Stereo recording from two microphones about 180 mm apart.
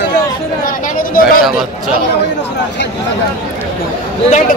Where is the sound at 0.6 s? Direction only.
50° left (ahead or behind).